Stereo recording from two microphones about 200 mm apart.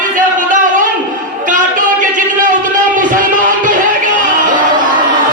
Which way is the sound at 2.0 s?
40° right (ahead or behind).